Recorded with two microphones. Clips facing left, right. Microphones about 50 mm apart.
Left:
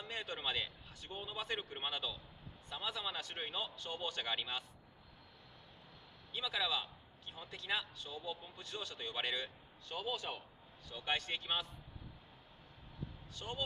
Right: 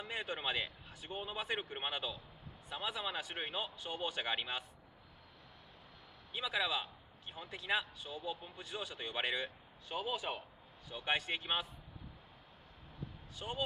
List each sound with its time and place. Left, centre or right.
0.0 s a man's voice: centre
6.3 s a man's voice: centre
13.4 s a man's voice: centre